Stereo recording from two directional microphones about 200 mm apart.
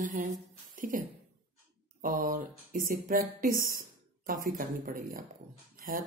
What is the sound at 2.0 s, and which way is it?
Speech, 40° right (ahead or behind).